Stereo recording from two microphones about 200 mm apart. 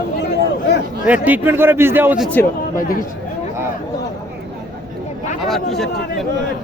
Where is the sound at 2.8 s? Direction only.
45° left (ahead or behind).